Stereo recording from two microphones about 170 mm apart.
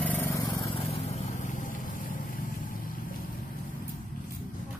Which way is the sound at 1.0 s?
45° left (ahead or behind).